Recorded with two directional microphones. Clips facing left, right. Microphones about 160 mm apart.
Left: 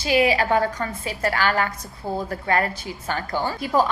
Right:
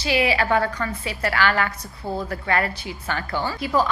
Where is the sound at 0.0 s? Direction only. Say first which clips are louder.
Left 2 dB; 45° left (ahead or behind).